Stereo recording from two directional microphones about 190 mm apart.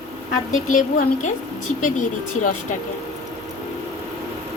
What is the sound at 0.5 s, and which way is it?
A woman's voice, 45° left (ahead or behind).